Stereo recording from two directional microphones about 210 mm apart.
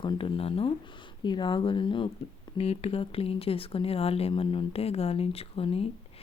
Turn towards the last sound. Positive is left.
turn(degrees=25)  # may be behind; listen again after turning